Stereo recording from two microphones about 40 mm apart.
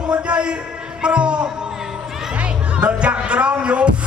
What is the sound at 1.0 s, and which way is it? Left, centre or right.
Music, right.